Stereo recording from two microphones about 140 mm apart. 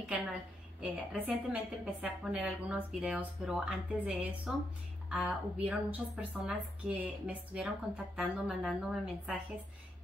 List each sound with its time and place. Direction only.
0.7 s speech: 10° right (ahead or behind)